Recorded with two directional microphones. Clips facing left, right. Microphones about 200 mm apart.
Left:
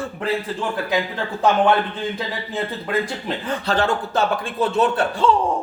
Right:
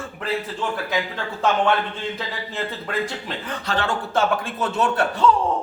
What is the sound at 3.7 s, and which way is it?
Speech, 35° left (ahead or behind).